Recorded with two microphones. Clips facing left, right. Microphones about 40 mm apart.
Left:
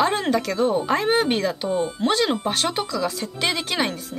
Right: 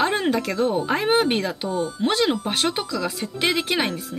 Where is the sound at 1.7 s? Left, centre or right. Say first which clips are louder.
Left 1 dB; left.